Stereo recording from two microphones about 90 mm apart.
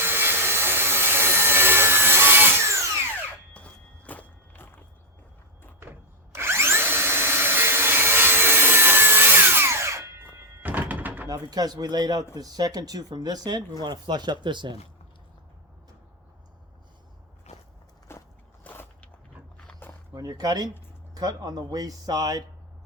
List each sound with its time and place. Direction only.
0.0 s wood: 25° right (ahead or behind)
3.5 s walk: 15° left (ahead or behind)
6.3 s tools: 30° right (ahead or behind)
10.2 s music: 20° right (ahead or behind)
11.3 s speech: 45° right (ahead or behind)
18.1 s walk: 30° left (ahead or behind)
18.6 s a sound: 20° left (ahead or behind)
20.1 s speech: 45° right (ahead or behind)